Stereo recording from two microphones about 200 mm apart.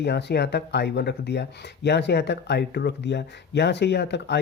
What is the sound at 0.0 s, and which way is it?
Speech, 55° left (ahead or behind).